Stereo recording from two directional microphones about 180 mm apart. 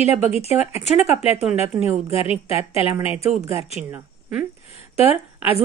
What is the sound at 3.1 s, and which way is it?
Speech, 5° right (ahead or behind).